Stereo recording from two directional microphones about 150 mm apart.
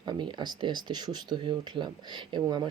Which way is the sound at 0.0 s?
30° right (ahead or behind).